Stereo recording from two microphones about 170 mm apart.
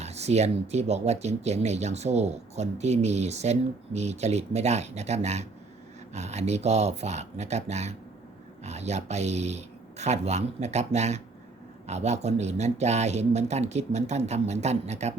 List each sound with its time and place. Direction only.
0.0 s speech: 40° right (ahead or behind)